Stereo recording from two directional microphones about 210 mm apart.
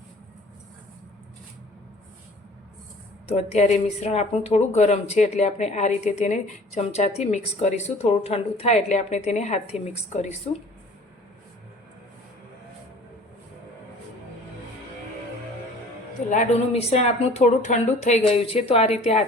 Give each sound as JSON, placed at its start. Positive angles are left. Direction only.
{"t": 3.3, "sound": "speech", "side_deg": 35}
{"t": 16.3, "sound": "speech", "side_deg": 35}